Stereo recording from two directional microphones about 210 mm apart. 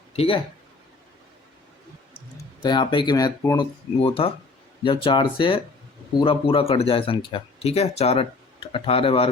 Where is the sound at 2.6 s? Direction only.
20° left (ahead or behind).